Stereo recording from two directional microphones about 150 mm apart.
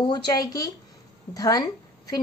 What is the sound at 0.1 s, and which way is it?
A woman's voice, 25° left (ahead or behind).